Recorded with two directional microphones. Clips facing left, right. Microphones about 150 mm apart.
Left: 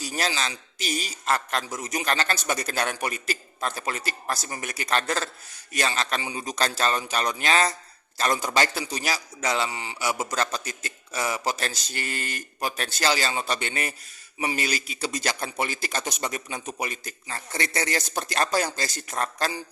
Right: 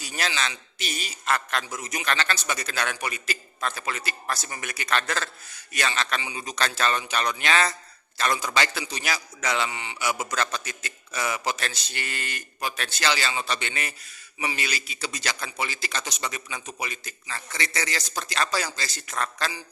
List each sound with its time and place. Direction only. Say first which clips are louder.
0.0 s a man's voice: left 2 dB; 40° left (ahead or behind)